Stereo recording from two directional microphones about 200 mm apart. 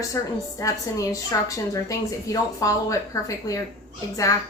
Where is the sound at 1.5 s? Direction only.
15° left (ahead or behind).